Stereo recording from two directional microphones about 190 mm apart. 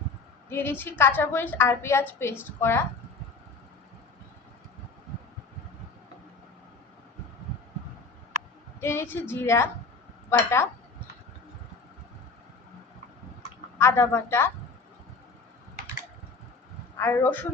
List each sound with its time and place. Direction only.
0.5 s a woman's voice: 10° left (ahead or behind)
8.8 s a woman's voice: 15° left (ahead or behind)
13.7 s a woman's voice: 15° left (ahead or behind)
17.0 s a woman's voice: 10° left (ahead or behind)